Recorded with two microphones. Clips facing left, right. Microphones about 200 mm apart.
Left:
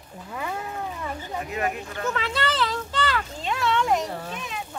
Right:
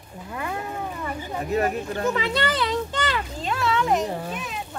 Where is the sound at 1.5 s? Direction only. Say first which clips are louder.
Right 7 dB; 40° right (ahead or behind).